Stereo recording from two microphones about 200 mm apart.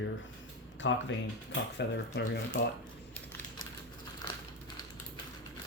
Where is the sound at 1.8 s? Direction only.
55° left (ahead or behind).